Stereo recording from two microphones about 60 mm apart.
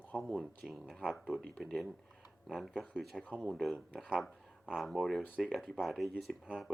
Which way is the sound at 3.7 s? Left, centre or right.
Left.